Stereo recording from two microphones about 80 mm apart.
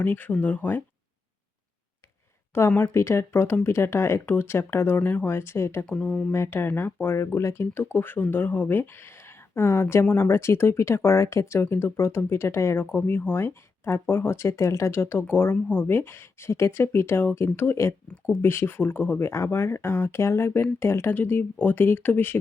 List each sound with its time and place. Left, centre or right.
0.0 s speech: left
2.6 s speech: left
6.0 s speech: centre
6.3 s speech: left